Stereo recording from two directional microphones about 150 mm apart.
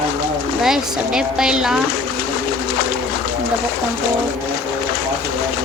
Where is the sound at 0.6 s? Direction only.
5° right (ahead or behind).